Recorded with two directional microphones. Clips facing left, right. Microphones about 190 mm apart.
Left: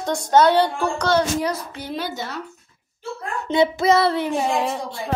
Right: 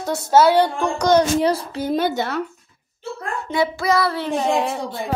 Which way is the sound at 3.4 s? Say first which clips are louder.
Left 3 dB; 20° left (ahead or behind).